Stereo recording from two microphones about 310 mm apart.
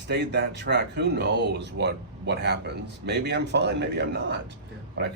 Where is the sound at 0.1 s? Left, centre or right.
Right.